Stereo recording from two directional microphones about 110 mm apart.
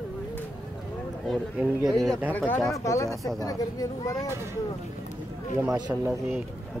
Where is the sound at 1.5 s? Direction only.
10° right (ahead or behind).